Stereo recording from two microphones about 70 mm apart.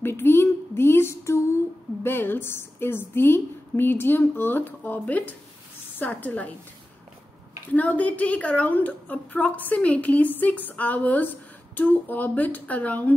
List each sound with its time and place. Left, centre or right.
0.0 s a woman's voice: left
7.7 s a woman's voice: left